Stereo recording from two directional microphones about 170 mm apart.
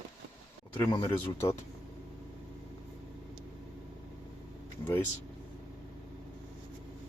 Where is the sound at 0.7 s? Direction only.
10° left (ahead or behind).